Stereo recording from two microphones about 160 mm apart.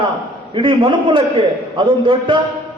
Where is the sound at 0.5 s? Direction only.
30° right (ahead or behind).